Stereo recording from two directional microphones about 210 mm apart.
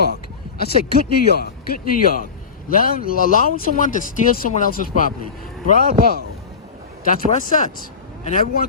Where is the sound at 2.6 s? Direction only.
40° left (ahead or behind).